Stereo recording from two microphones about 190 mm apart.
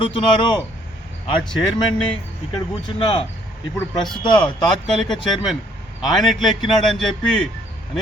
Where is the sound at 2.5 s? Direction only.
25° left (ahead or behind).